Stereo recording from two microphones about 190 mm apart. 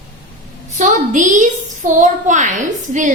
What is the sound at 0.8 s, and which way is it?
A woman's voice, 40° right (ahead or behind).